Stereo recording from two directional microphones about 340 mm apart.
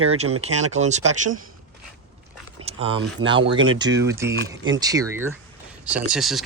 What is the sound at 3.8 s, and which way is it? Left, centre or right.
Speech, centre.